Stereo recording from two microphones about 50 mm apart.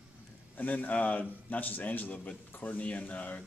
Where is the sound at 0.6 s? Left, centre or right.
Left.